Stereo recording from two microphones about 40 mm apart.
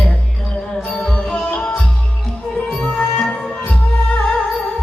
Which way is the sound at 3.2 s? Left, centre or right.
Centre.